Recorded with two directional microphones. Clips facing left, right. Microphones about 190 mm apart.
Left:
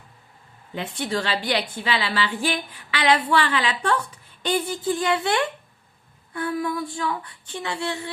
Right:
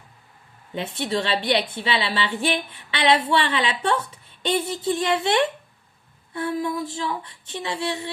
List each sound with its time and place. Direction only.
0.7 s a woman's voice: 20° right (ahead or behind)